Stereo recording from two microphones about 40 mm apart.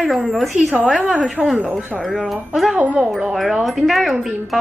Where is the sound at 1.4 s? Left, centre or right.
Right.